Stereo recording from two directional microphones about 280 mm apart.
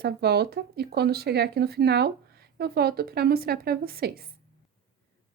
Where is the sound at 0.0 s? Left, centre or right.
Right.